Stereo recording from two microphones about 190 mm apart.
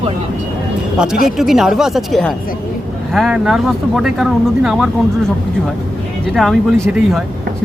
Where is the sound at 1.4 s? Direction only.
Centre (ahead or behind).